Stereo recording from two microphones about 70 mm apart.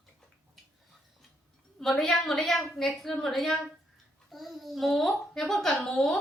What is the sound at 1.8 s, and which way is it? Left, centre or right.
A child's voice, centre.